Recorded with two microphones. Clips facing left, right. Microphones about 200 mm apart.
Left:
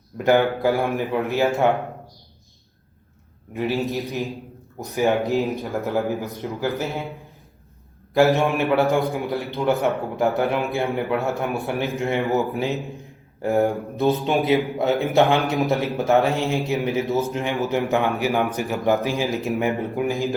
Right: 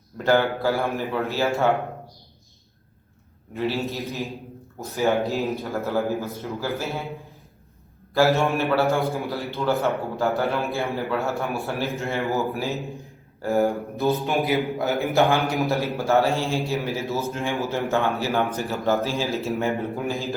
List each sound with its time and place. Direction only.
0.2 s a man's voice: 15° left (ahead or behind)
3.5 s a man's voice: 15° left (ahead or behind)
8.3 s a man's voice: 15° left (ahead or behind)
13.5 s speech: centre (ahead or behind)
14.4 s a man's voice: 20° left (ahead or behind)